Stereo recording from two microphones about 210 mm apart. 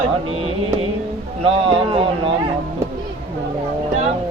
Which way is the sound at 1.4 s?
25° right (ahead or behind).